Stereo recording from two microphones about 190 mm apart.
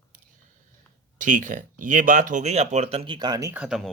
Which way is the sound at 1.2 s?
45° right (ahead or behind).